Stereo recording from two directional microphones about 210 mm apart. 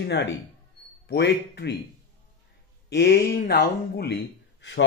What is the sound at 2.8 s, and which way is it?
Speech, 50° left (ahead or behind).